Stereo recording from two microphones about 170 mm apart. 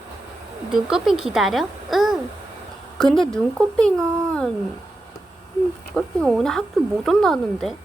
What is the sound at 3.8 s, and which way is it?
Speech, 5° left (ahead or behind).